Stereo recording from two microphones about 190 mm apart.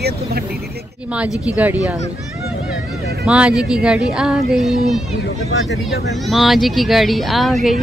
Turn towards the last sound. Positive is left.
turn(degrees=0)  # may be behind; listen again after turning